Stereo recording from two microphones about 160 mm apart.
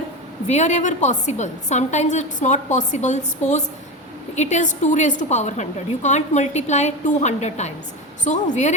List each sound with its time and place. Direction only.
0.4 s a woman's voice: 45° left (ahead or behind)